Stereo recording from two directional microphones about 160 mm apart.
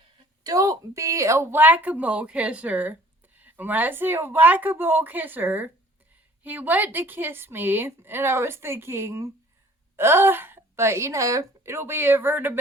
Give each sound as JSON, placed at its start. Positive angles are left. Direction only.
{"t": 0.4, "sound": "a woman's voice", "side_deg": -20}